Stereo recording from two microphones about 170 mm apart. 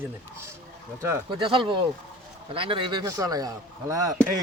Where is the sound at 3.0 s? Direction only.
20° right (ahead or behind).